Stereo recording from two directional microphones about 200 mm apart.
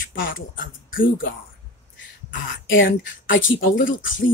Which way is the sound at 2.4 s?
70° left (ahead or behind).